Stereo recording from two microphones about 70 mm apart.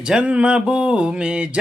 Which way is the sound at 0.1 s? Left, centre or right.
Centre.